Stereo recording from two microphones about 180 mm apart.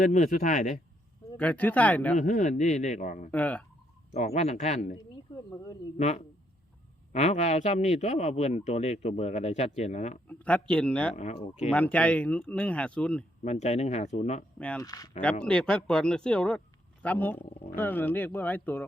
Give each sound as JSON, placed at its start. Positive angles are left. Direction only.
{"t": 0.0, "sound": "speech", "side_deg": 45}
{"t": 1.4, "sound": "speech", "side_deg": 10}
{"t": 2.1, "sound": "speech", "side_deg": 45}
{"t": 3.3, "sound": "speech", "side_deg": 10}
{"t": 4.4, "sound": "speech", "side_deg": 40}
{"t": 6.0, "sound": "speech", "side_deg": 40}
{"t": 10.2, "sound": "speech", "side_deg": 5}
{"t": 11.1, "sound": "speech", "side_deg": 40}
{"t": 11.7, "sound": "speech", "side_deg": 5}
{"t": 13.4, "sound": "speech", "side_deg": 40}
{"t": 14.8, "sound": "speech", "side_deg": 20}
{"t": 15.4, "sound": "speech", "side_deg": 5}